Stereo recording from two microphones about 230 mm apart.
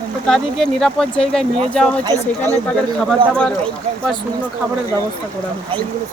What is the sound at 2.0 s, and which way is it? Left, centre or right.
Speech, centre.